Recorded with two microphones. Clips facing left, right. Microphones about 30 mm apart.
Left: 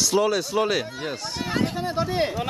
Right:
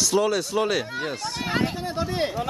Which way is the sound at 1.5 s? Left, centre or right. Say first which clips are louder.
Even; centre.